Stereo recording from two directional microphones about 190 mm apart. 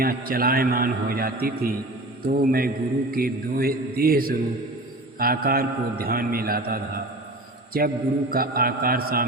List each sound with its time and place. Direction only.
0.0 s a man's voice: 50° right (ahead or behind)
7.7 s a man's voice: 50° right (ahead or behind)